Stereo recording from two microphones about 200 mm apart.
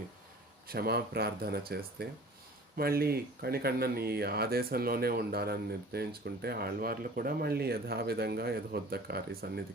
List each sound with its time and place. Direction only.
0.7 s speech: 50° right (ahead or behind)